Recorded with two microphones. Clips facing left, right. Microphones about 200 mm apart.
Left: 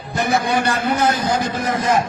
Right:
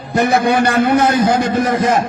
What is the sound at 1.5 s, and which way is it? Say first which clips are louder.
Speech: right 4 dB; 60° right (ahead or behind).